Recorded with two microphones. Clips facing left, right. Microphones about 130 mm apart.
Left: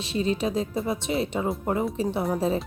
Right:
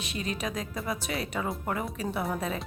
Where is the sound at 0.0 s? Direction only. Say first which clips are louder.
Left 8 dB; 30° left (ahead or behind).